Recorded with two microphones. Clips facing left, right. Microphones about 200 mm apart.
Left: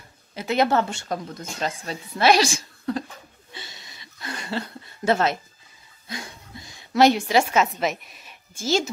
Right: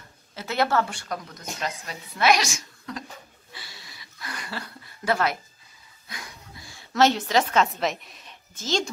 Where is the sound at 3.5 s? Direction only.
20° left (ahead or behind).